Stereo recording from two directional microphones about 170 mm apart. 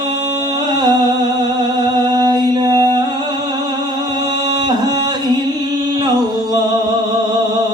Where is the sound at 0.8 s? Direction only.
25° right (ahead or behind).